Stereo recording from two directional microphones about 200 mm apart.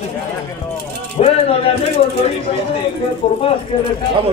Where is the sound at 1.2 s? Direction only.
30° left (ahead or behind).